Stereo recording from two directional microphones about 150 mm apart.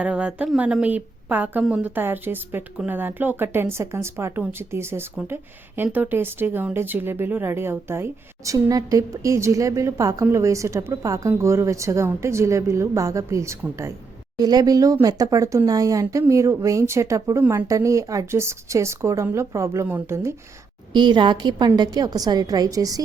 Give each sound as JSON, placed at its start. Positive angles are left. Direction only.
{"t": 0.0, "sound": "a woman's voice", "side_deg": -10}
{"t": 17.7, "sound": "speech", "side_deg": -20}
{"t": 20.9, "sound": "speech", "side_deg": -30}